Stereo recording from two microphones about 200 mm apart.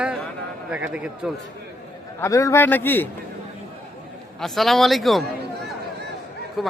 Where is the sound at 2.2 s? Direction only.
15° left (ahead or behind).